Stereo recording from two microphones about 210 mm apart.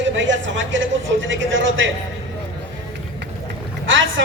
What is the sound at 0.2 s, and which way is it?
A man's voice, 60° right (ahead or behind).